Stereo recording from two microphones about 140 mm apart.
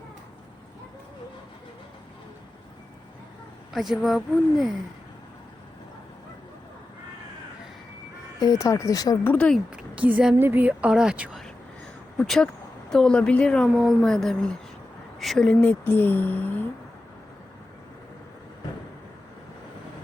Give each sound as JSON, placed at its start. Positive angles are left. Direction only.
{"t": 3.7, "sound": "a woman's voice", "side_deg": 0}
{"t": 8.4, "sound": "speech", "side_deg": 25}
{"t": 9.3, "sound": "speech", "side_deg": 10}
{"t": 9.6, "sound": "a woman's voice", "side_deg": -10}